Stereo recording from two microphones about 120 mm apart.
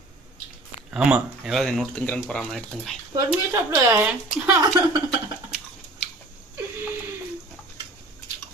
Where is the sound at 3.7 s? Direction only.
15° right (ahead or behind).